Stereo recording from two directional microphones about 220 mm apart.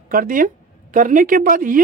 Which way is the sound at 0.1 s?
40° right (ahead or behind).